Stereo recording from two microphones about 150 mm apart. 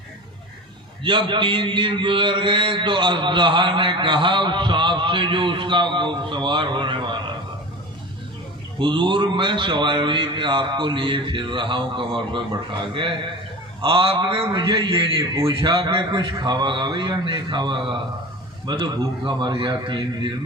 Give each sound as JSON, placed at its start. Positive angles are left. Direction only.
{"t": 1.0, "sound": "a man's voice", "side_deg": -35}
{"t": 8.8, "sound": "a man's voice", "side_deg": -30}